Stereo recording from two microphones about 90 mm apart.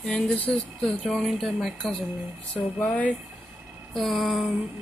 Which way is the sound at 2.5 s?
15° left (ahead or behind).